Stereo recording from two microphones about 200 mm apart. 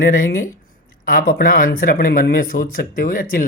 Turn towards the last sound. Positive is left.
turn(degrees=45)  # may be behind; listen again after turning